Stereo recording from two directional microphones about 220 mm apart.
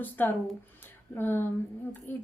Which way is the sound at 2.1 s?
10° left (ahead or behind).